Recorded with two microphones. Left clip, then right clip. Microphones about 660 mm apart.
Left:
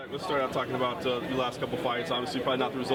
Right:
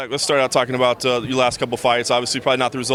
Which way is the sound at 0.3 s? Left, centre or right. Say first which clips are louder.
Right 11 dB; right.